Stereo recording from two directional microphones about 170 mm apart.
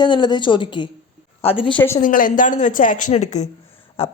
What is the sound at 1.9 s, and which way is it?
A woman's voice, 50° left (ahead or behind).